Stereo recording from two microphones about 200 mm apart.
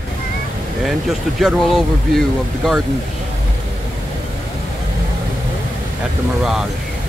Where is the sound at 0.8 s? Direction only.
Centre (ahead or behind).